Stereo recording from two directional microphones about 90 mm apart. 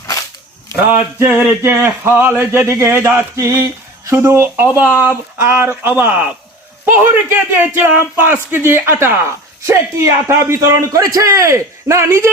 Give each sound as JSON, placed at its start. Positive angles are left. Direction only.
{"t": 1.3, "sound": "a man's voice", "side_deg": -25}